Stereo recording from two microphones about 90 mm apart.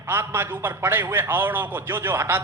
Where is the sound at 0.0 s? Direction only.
25° right (ahead or behind).